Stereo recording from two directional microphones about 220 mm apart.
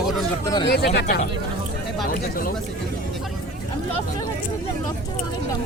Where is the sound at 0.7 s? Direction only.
50° left (ahead or behind).